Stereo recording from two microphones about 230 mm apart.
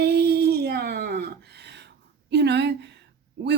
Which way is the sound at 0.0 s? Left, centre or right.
Right.